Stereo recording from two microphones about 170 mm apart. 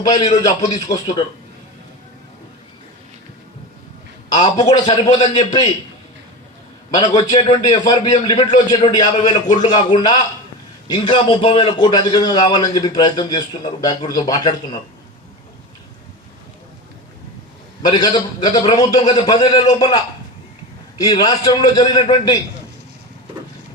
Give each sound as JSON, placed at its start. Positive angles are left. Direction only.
{"t": 0.0, "sound": "a man's voice", "side_deg": 20}
{"t": 4.6, "sound": "a man's voice", "side_deg": 20}
{"t": 6.9, "sound": "a man's voice", "side_deg": 20}
{"t": 17.8, "sound": "a man's voice", "side_deg": 25}
{"t": 21.0, "sound": "a man's voice", "side_deg": 25}